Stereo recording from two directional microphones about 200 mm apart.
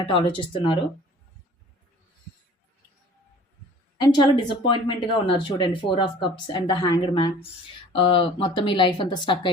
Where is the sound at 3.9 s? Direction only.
20° left (ahead or behind).